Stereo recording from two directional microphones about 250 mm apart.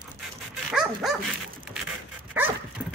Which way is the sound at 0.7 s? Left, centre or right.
Centre.